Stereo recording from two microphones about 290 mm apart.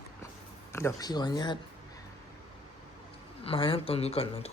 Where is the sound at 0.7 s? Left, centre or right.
Centre.